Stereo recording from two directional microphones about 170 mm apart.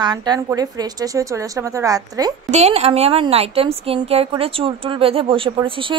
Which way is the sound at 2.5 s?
40° right (ahead or behind).